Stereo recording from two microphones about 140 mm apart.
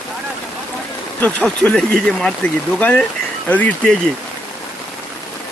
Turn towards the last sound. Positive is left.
turn(degrees=10)  # may be behind; listen again after turning